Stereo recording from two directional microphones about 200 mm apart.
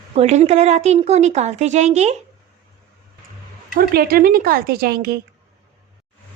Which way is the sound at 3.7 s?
50° right (ahead or behind).